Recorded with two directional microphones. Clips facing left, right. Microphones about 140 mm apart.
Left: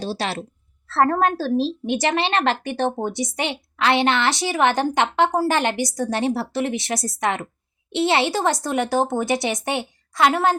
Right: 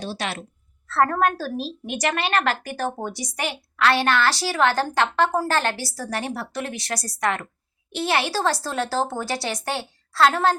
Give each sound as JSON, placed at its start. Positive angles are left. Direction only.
{"t": 0.0, "sound": "a woman's voice", "side_deg": 30}